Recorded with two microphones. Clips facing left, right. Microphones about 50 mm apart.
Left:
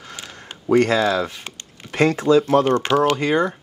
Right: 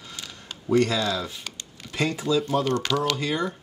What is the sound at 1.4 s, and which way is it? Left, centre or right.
Chopping, left.